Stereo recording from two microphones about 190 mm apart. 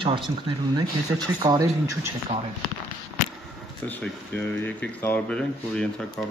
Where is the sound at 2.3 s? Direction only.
35° right (ahead or behind).